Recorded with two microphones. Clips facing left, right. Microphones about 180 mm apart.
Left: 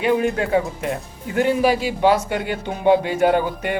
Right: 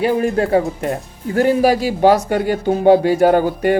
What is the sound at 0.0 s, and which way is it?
Speech, 35° right (ahead or behind).